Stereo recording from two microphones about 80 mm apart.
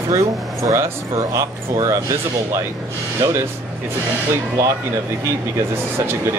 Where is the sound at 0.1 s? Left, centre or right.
Right.